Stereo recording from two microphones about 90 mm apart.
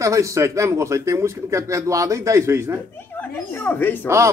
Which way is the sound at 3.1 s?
20° left (ahead or behind).